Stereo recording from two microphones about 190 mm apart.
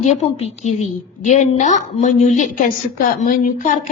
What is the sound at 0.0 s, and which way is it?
A woman's voice, 35° left (ahead or behind).